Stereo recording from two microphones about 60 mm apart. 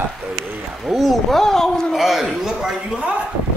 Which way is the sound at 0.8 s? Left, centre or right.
Centre.